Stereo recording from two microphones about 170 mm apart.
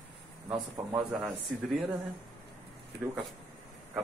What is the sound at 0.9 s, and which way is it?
Speech, centre (ahead or behind).